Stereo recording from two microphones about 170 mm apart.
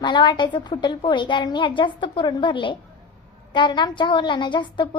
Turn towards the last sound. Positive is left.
turn(degrees=25)  # may be behind; listen again after turning